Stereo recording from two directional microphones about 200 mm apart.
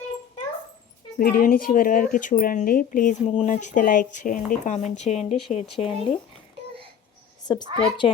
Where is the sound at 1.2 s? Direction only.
45° left (ahead or behind).